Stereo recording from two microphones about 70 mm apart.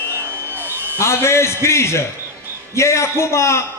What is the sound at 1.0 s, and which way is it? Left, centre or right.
A man's voice, left.